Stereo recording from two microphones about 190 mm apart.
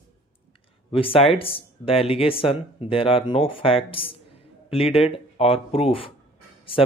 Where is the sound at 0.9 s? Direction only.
30° left (ahead or behind).